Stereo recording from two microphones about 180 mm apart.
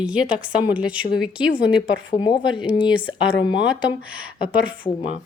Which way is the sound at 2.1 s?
35° left (ahead or behind).